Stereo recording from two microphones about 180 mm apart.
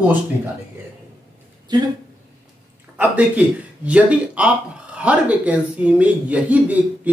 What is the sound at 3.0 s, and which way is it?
Speech, 10° right (ahead or behind).